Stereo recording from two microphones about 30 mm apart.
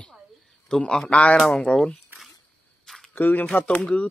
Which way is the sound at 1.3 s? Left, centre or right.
Centre.